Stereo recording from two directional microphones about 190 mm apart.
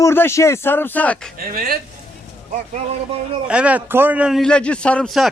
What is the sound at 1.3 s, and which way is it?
Speech, 50° right (ahead or behind).